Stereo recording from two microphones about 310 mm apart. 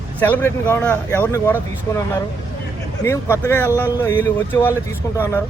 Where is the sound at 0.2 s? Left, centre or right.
Centre.